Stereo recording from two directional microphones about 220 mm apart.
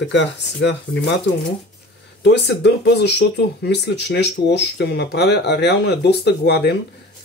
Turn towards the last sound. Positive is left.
turn(degrees=50)  # may be behind; listen again after turning